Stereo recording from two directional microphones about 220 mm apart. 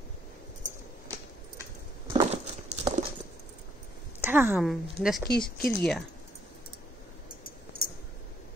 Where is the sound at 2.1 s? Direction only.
30° right (ahead or behind).